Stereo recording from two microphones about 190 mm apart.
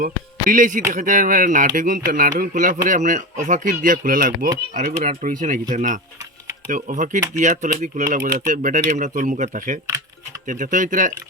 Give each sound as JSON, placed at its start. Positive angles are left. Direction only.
{"t": 0.0, "sound": "speech", "side_deg": -45}